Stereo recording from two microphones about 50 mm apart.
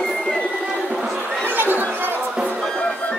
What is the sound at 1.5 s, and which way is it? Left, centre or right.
Chatter, right.